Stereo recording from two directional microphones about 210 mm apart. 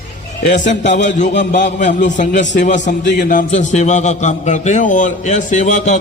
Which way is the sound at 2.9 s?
55° left (ahead or behind).